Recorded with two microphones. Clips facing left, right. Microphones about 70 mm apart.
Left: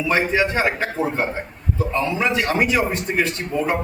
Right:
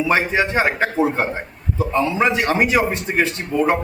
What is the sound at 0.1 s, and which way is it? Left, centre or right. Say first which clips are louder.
A man's voice: left 1 dB; right.